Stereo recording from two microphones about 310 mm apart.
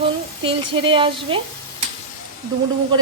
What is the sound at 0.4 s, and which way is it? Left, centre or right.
Speech, centre.